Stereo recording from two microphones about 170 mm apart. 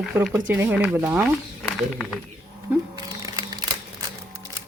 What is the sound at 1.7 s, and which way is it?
Speech, centre (ahead or behind).